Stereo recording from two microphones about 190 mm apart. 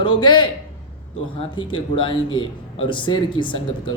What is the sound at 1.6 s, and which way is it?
Speech, 25° left (ahead or behind).